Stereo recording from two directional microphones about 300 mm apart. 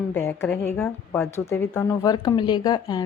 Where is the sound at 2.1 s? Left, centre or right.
Centre.